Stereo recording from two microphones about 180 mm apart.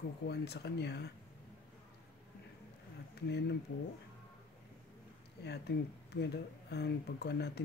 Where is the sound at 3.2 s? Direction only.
65° left (ahead or behind).